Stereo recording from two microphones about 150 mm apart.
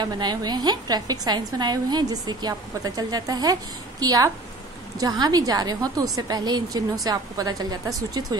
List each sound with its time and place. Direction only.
0.0 s a woman's voice: 30° right (ahead or behind)